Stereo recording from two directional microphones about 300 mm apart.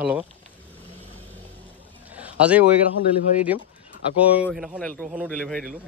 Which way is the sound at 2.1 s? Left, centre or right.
Centre.